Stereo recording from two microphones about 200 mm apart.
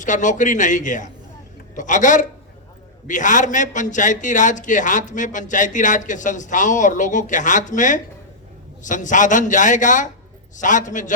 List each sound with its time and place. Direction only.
0.0 s a man's voice: 40° left (ahead or behind)